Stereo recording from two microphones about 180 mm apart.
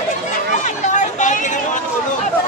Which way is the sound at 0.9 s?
45° left (ahead or behind).